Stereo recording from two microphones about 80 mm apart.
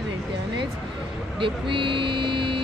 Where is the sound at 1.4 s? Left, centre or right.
Right.